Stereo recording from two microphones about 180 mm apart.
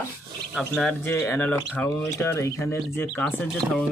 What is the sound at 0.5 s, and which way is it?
Speech, centre (ahead or behind).